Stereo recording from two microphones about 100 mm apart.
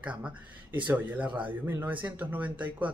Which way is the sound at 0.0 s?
15° right (ahead or behind).